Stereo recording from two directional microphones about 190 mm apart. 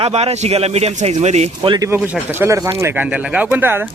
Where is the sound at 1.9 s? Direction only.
10° right (ahead or behind).